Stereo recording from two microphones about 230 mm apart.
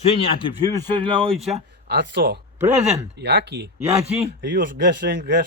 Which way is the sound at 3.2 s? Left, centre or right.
Right.